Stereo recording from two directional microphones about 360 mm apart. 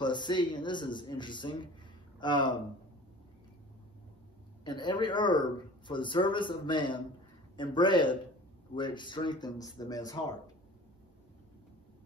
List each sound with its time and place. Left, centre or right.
0.0 s speech: centre
4.6 s speech: centre